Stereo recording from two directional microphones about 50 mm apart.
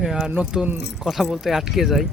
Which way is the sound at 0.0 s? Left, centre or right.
Centre.